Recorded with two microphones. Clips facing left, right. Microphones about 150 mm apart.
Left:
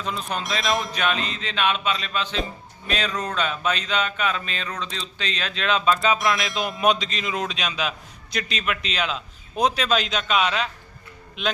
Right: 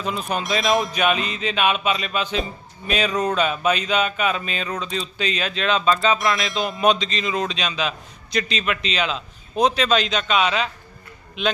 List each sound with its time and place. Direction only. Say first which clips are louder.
0.0 s speech: right 3 dB; 5° right (ahead or behind)
0.9 s music: right 4 dB; 10° right (ahead or behind)
2.8 s speech: right 5 dB; 10° right (ahead or behind)